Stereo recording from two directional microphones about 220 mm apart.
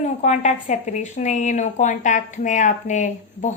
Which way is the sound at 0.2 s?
30° left (ahead or behind).